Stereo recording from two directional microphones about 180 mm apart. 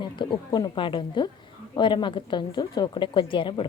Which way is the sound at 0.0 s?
25° left (ahead or behind).